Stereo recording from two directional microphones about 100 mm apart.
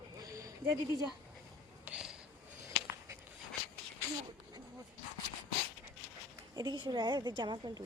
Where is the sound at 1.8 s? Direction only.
10° right (ahead or behind).